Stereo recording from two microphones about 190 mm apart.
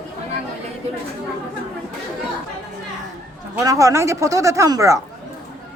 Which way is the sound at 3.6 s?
15° right (ahead or behind).